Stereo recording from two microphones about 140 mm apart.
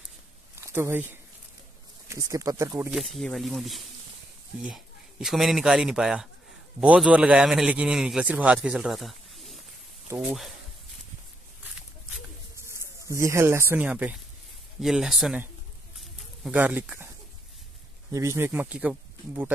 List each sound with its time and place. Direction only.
0.6 s speech: 20° right (ahead or behind)
2.9 s a man's voice: centre (ahead or behind)
5.2 s a man's voice: centre (ahead or behind)
12.5 s a man's voice: 20° right (ahead or behind); by 15.4 s 5° right (ahead or behind)
16.5 s speech: 10° right (ahead or behind)
18.1 s speech: 20° right (ahead or behind)